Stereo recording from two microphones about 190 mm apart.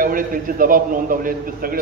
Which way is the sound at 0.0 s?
45° right (ahead or behind).